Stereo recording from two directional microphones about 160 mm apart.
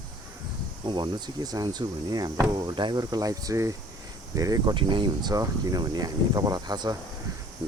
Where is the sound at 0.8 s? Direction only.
30° right (ahead or behind).